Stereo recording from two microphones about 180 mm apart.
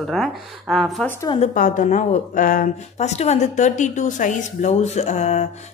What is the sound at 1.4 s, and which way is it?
Speech, 45° left (ahead or behind).